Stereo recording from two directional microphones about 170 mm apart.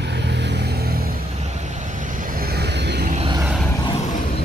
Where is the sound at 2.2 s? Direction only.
55° right (ahead or behind); by 3.1 s 80° right.